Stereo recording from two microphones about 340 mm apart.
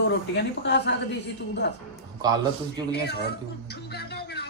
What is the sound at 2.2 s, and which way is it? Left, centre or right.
Speech, centre.